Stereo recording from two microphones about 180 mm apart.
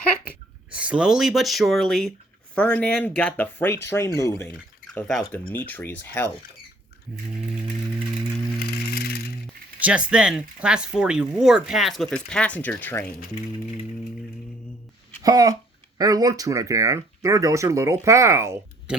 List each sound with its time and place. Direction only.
0.7 s speech: 5° right (ahead or behind); by 4.4 s 15° left (ahead or behind)
4.9 s speech: 5° left (ahead or behind)
8.5 s bicycle: 60° left (ahead or behind)
9.8 s speech: 5° right (ahead or behind); by 13.1 s 10° left (ahead or behind)
15.2 s a child's voice: 20° right (ahead or behind)